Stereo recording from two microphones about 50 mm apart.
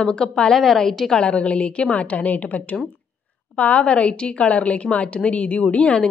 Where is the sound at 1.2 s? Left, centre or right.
Left.